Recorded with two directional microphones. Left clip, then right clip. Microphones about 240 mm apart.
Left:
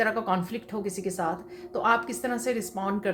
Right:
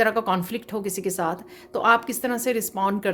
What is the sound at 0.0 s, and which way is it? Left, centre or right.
A woman's voice, right.